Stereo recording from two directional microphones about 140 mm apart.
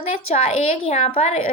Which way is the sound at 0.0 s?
45° left (ahead or behind).